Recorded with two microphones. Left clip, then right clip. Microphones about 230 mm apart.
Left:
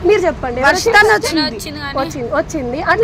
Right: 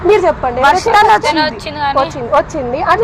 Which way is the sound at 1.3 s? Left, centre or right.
Left.